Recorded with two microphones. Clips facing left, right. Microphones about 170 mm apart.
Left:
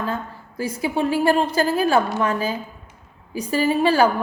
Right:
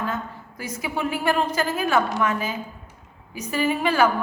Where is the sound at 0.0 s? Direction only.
30° left (ahead or behind).